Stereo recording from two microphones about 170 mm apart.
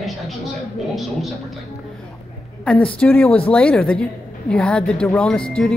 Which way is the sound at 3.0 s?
10° left (ahead or behind).